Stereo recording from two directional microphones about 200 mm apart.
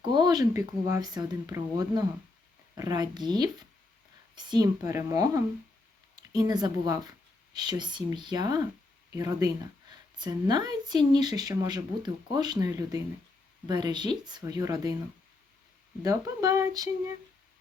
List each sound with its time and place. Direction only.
0.0 s speech: 20° right (ahead or behind)
16.0 s speech: 15° right (ahead or behind)